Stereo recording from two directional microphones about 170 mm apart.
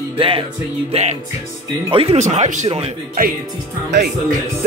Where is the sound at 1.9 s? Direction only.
35° right (ahead or behind).